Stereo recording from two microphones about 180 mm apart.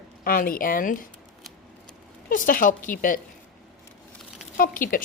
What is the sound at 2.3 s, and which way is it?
Speech, 50° left (ahead or behind).